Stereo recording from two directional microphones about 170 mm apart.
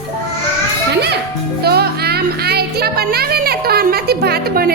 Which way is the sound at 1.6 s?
70° right (ahead or behind).